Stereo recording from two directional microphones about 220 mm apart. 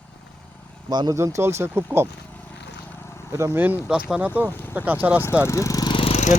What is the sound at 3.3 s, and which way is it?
Speech, 15° right (ahead or behind).